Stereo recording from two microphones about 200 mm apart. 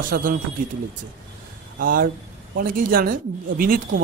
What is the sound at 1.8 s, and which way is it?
Speech, 45° right (ahead or behind).